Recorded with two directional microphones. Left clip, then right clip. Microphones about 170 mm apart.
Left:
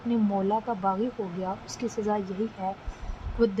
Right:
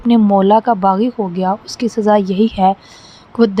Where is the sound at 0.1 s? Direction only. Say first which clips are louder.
Right 16 dB; 55° right (ahead or behind).